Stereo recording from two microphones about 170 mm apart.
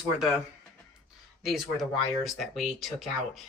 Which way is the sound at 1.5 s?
Centre (ahead or behind).